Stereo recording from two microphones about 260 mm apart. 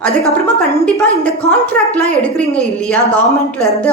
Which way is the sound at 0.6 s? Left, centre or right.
Centre.